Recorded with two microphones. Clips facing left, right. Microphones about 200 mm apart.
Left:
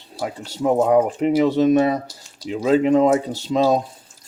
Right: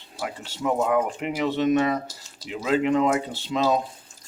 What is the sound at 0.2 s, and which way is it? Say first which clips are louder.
Speech: left 6 dB; 40° left (ahead or behind).